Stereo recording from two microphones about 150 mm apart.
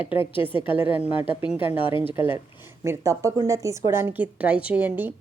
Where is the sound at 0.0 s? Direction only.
35° left (ahead or behind).